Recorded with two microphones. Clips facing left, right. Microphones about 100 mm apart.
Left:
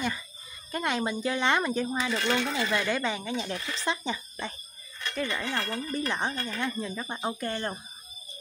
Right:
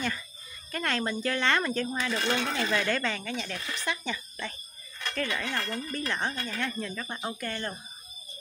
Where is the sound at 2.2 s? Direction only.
30° right (ahead or behind).